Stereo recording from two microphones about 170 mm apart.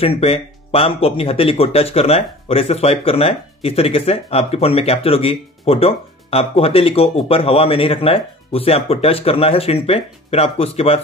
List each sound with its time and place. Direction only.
0.0 s speech: 35° left (ahead or behind)